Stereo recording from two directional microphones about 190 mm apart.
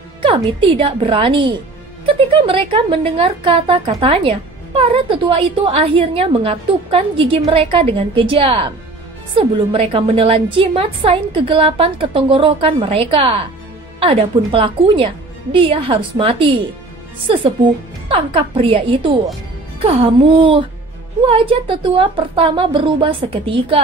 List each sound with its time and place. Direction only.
0.2 s a woman's voice: 25° right (ahead or behind)